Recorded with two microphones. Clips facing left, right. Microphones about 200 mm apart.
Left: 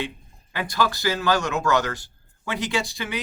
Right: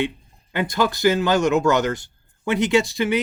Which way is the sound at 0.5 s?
20° right (ahead or behind).